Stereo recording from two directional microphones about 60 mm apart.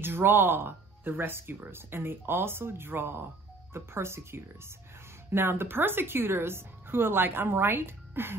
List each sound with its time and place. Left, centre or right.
0.0 s speech: right